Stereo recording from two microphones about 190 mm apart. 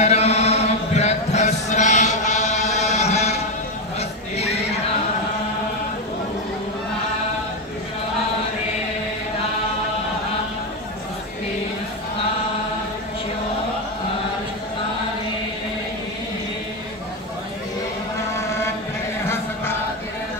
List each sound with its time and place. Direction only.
0.0 s chant: 35° left (ahead or behind)